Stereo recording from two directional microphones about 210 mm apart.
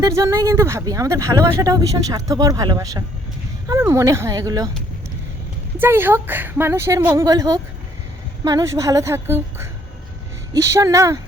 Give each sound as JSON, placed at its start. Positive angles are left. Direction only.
{"t": 0.0, "sound": "speech", "side_deg": -15}
{"t": 5.8, "sound": "speech", "side_deg": -10}